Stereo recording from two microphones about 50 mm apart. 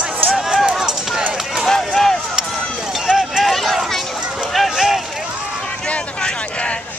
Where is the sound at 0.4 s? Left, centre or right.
Centre.